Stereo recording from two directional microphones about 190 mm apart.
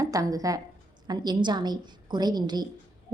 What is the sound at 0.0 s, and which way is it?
A woman's voice, 20° right (ahead or behind).